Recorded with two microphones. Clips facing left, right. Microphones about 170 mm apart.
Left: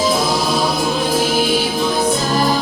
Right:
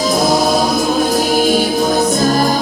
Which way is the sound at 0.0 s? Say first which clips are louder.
Right 4 dB; 45° right (ahead or behind).